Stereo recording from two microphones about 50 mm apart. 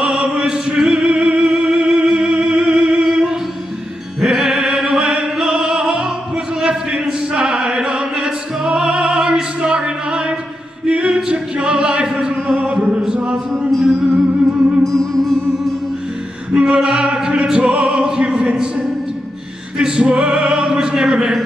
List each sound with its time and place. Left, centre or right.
0.0 s music: centre
10.9 s a capella: right
11.2 s music: centre
13.5 s music: centre
14.8 s music: centre
16.5 s music: centre
19.8 s opera: centre